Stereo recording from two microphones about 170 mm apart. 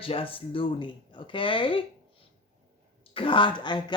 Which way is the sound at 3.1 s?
30° left (ahead or behind).